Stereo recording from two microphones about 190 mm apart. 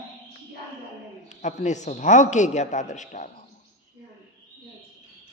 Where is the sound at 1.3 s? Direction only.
40° left (ahead or behind).